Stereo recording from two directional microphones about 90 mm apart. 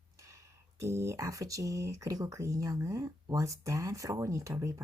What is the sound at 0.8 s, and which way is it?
Speech, 35° right (ahead or behind).